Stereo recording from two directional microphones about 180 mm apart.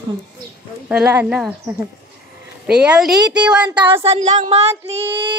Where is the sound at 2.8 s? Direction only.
5° right (ahead or behind).